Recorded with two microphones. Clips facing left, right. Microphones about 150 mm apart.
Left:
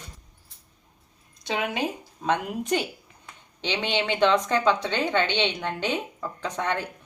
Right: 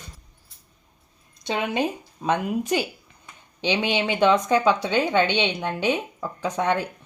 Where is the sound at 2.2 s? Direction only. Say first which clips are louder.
Right 3 dB; 5° right (ahead or behind).